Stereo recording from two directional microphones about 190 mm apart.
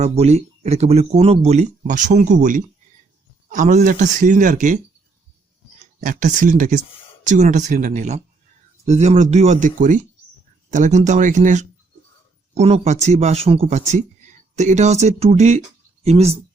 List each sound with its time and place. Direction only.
0.0 s a man's voice: 35° right (ahead or behind)
6.0 s a man's voice: 45° right (ahead or behind)